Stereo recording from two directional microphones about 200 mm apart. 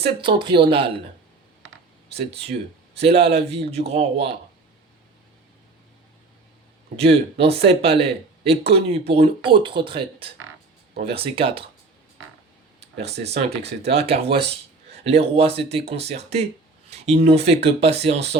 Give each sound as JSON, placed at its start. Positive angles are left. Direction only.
{"t": 0.0, "sound": "speech", "side_deg": -25}
{"t": 2.1, "sound": "speech", "side_deg": -30}
{"t": 6.9, "sound": "speech", "side_deg": -30}
{"t": 13.1, "sound": "speech", "side_deg": -55}
{"t": 13.8, "sound": "speech", "side_deg": -30}